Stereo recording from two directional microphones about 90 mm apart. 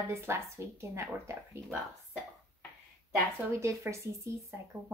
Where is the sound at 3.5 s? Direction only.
35° right (ahead or behind).